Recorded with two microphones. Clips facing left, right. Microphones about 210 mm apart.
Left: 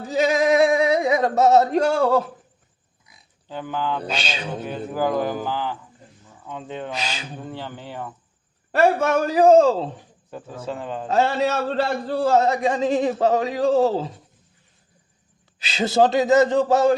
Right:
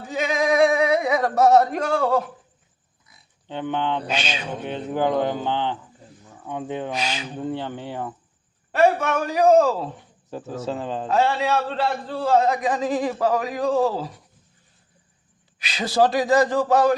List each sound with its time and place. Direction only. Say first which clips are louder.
0.0 s a sound: left 4 dB; 40° left (ahead or behind)
0.5 s a sound: right 2 dB; 25° left (ahead or behind)
1.8 s a man's voice: left 3 dB; 45° left (ahead or behind)
3.5 s speech: right 2 dB; 25° right (ahead or behind)
4.0 s a man's voice: right 1 dB; 35° left (ahead or behind)
4.6 s speech: right 1 dB; 25° right (ahead or behind)
8.7 s a man's voice: left 1 dB; 40° left (ahead or behind)
9.2 s speech: left 2 dB; 30° left (ahead or behind)
10.7 s speech: right 1 dB; 30° right (ahead or behind)
11.1 s a man's voice: left 1 dB; 40° left (ahead or behind)
12.5 s speech: left 2 dB; 30° left (ahead or behind)
15.5 s speech: left 2 dB; 25° left (ahead or behind)